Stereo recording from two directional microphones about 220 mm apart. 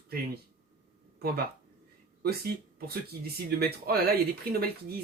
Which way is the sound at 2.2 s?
45° right (ahead or behind).